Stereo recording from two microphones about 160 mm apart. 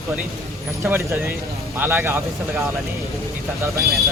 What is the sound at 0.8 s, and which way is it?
Speech, 15° right (ahead or behind).